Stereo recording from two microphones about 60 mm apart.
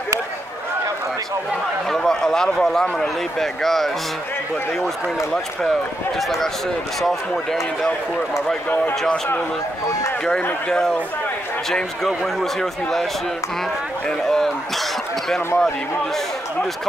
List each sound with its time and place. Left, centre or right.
1.9 s speech: centre
6.1 s speech: centre
8.6 s speech: left
12.4 s speech: centre
14.0 s speech: centre